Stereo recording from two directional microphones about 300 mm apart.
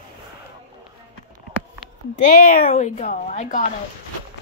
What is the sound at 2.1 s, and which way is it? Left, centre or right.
A woman's voice, left.